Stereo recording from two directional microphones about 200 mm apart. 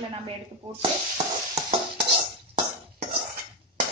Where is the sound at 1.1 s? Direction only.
35° right (ahead or behind).